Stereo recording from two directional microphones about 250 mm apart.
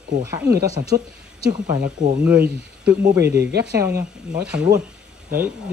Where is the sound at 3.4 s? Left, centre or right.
Right.